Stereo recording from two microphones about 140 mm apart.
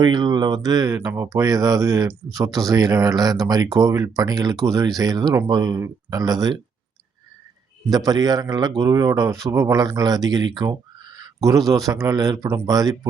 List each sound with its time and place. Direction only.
0.0 s a man's voice: 30° right (ahead or behind)
0.9 s a man's voice: 15° right (ahead or behind)
7.9 s a man's voice: 25° right (ahead or behind)